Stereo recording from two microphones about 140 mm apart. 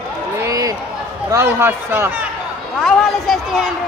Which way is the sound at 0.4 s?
25° right (ahead or behind).